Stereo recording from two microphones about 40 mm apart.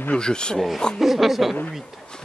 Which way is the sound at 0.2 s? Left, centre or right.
Centre.